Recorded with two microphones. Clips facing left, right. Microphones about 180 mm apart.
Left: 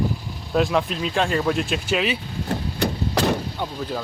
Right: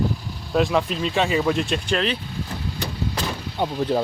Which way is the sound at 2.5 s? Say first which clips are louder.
Left 10 dB; 65° left (ahead or behind).